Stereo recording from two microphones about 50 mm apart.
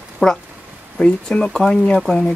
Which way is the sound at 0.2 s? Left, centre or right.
Centre.